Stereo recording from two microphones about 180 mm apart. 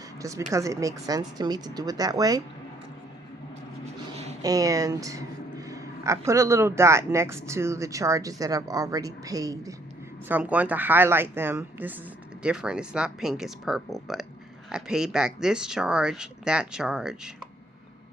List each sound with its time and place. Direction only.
0.2 s speech: 15° right (ahead or behind)
4.4 s speech: 20° right (ahead or behind)
10.2 s speech: 10° right (ahead or behind)